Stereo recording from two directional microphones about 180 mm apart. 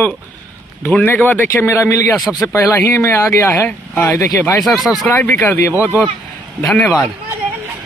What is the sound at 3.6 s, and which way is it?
Speech, 15° left (ahead or behind).